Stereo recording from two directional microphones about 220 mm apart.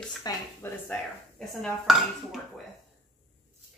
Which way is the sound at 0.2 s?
10° left (ahead or behind).